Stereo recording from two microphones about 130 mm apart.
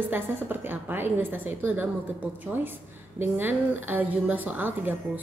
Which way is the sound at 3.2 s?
15° right (ahead or behind).